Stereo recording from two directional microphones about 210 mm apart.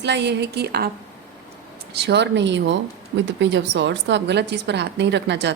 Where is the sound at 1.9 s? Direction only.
55° right (ahead or behind).